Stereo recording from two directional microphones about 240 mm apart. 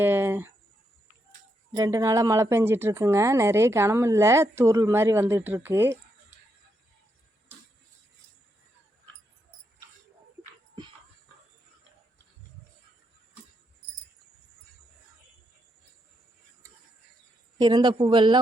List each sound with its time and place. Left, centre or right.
0.0 s a sound: centre
1.7 s speech: centre
17.6 s a man's voice: centre